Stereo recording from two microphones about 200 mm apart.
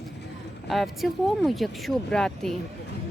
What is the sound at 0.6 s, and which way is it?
Speech, centre (ahead or behind).